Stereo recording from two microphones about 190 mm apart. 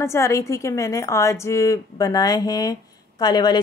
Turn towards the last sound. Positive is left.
turn(degrees=20)  # may be behind; listen again after turning